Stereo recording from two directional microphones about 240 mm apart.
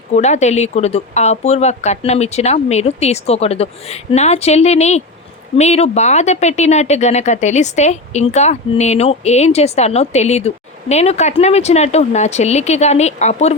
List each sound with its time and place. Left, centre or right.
0.1 s speech: left